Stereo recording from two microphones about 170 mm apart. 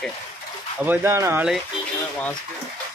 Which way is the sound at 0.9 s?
15° right (ahead or behind).